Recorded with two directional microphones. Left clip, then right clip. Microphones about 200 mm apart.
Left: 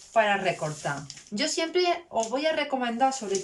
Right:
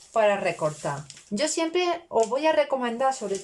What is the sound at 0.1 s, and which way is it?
Speech, 25° right (ahead or behind).